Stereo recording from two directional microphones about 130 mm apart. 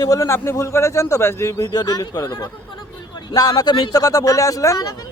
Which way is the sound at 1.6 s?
30° left (ahead or behind).